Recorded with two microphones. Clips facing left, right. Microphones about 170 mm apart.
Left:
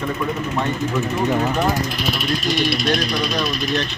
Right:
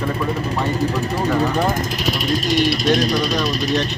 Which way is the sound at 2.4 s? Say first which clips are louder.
Right 3 dB; 40° right (ahead or behind).